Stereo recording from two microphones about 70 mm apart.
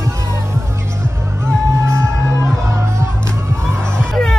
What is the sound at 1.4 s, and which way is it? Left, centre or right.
Music, right.